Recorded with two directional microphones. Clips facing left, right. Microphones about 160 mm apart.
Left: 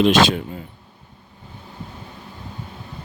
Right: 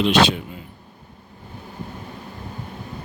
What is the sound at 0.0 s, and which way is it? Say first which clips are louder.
Speech: left 2 dB; 45° left (ahead or behind).